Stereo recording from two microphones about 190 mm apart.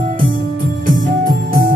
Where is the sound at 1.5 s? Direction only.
50° right (ahead or behind).